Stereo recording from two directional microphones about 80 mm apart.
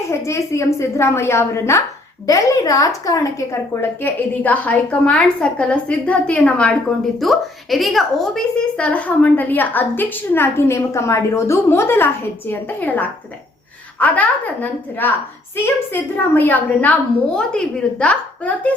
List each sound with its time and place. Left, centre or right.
0.1 s a woman's voice: left
2.2 s a woman's voice: left; by 6.7 s centre
7.2 s a woman's voice: centre